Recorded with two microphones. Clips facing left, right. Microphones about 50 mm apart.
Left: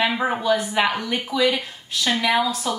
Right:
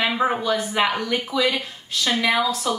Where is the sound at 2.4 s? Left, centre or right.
Centre.